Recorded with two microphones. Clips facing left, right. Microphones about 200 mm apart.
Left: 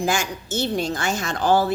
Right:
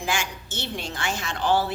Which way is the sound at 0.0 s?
40° left (ahead or behind).